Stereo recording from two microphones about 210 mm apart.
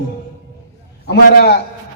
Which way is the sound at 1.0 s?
50° left (ahead or behind).